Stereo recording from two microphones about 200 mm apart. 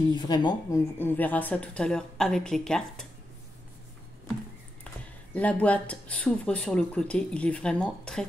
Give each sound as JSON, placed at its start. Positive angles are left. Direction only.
{"t": 0.1, "sound": "speech", "side_deg": 20}
{"t": 0.9, "sound": "speech", "side_deg": 10}
{"t": 5.3, "sound": "speech", "side_deg": 5}